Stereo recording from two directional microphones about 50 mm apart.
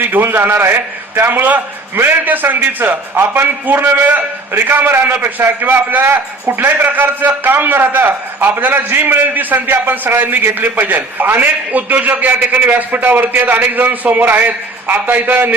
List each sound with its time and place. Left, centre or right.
0.0 s a man's voice: right